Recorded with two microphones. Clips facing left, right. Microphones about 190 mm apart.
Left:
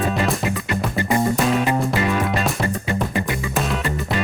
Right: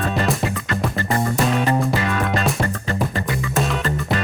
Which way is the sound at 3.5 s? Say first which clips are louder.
Right 2 dB; centre (ahead or behind).